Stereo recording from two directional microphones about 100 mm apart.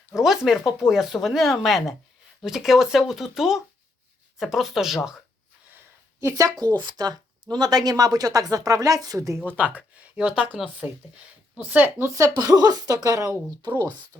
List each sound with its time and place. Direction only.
0.1 s speech: 5° right (ahead or behind)
6.1 s speech: 35° right (ahead or behind)
6.7 s speech: 45° right (ahead or behind)
9.7 s speech: 10° right (ahead or behind)
12.1 s speech: 40° right (ahead or behind)